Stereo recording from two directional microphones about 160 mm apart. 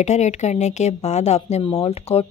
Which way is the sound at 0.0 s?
45° left (ahead or behind).